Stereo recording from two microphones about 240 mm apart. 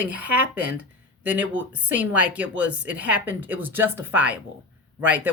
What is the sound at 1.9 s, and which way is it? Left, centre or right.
Speech, centre.